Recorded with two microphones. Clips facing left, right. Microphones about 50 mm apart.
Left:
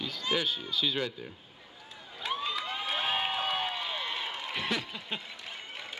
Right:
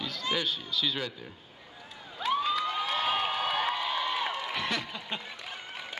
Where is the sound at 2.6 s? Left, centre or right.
Centre.